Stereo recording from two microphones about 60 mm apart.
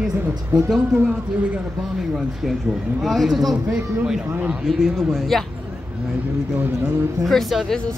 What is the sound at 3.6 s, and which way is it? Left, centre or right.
A man's voice, centre.